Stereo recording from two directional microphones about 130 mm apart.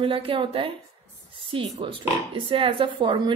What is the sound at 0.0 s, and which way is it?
A woman's voice, 45° right (ahead or behind).